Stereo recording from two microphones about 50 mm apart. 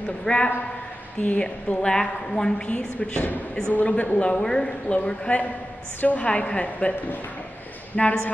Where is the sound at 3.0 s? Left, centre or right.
Left; by 4.9 s centre.